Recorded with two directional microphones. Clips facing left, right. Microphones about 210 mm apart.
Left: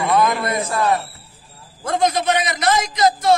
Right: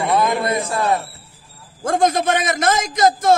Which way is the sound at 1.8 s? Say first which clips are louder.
Right 2 dB; 50° right (ahead or behind).